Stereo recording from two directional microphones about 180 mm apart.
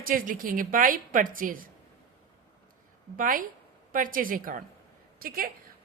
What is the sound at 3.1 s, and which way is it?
A woman's voice, 50° right (ahead or behind).